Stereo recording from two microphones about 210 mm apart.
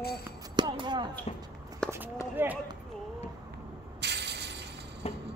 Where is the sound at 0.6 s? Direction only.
20° right (ahead or behind).